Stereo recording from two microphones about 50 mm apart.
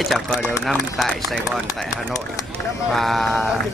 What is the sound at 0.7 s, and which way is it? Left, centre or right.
Speech, centre.